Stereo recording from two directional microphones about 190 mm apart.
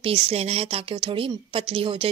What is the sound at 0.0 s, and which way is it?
Speech, 30° right (ahead or behind).